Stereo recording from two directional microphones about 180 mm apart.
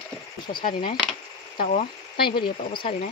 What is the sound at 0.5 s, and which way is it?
Speech, 25° left (ahead or behind).